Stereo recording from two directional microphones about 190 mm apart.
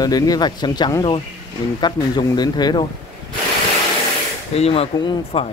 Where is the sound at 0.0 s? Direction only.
20° left (ahead or behind).